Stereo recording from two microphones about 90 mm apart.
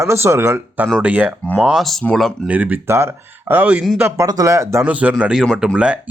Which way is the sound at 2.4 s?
15° right (ahead or behind).